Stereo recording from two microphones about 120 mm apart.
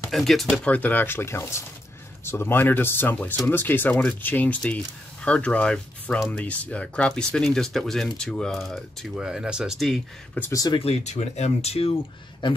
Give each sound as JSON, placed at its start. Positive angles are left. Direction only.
{"t": 0.1, "sound": "speech", "side_deg": 0}
{"t": 0.7, "sound": "speech", "side_deg": 15}
{"t": 10.5, "sound": "speech", "side_deg": 30}
{"t": 10.8, "sound": "speech", "side_deg": 60}